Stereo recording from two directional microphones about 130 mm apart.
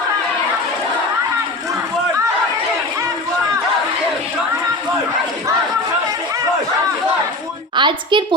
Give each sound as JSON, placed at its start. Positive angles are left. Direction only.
{"t": 7.8, "sound": "a woman's voice", "side_deg": -35}